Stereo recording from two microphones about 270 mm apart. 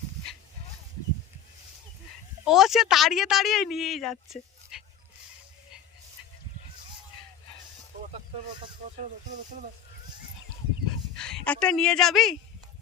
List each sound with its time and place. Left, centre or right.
2.4 s speech: centre
11.2 s speech: centre